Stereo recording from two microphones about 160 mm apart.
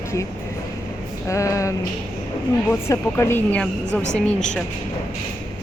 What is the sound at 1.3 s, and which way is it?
A woman's voice, 20° left (ahead or behind).